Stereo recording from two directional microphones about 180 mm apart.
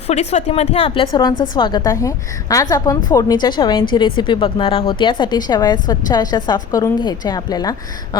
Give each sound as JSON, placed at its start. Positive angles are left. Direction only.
{"t": 0.1, "sound": "a woman's voice", "side_deg": 35}